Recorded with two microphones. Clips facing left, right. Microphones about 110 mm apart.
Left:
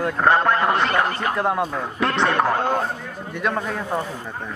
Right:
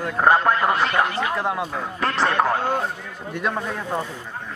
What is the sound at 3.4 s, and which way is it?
Speech, 5° left (ahead or behind).